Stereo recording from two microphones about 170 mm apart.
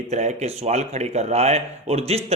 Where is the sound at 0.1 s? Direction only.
45° right (ahead or behind).